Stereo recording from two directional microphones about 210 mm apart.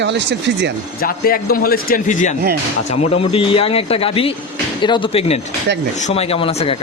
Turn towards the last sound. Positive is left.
turn(degrees=25)  # may be behind; listen again after turning